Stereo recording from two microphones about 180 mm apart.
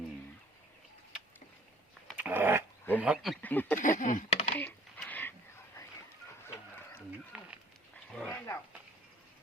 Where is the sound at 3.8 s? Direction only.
45° left (ahead or behind).